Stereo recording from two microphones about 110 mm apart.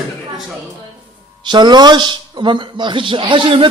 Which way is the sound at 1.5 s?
40° right (ahead or behind).